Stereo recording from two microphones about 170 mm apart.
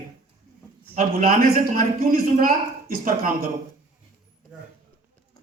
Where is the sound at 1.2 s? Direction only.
55° right (ahead or behind).